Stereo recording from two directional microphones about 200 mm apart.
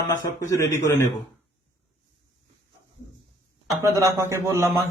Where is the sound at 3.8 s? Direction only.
15° right (ahead or behind).